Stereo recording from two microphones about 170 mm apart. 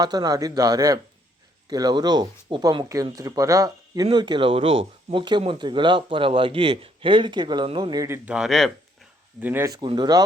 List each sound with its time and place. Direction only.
0.0 s speech: 20° right (ahead or behind); by 8.7 s centre (ahead or behind)
9.4 s speech: 10° right (ahead or behind)